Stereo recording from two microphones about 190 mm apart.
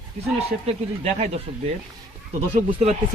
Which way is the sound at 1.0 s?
35° right (ahead or behind).